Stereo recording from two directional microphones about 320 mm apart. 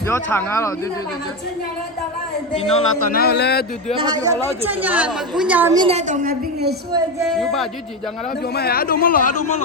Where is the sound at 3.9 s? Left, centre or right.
Centre; by 6.7 s right.